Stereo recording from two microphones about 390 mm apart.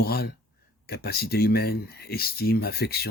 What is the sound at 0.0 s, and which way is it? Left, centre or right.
Speech, left.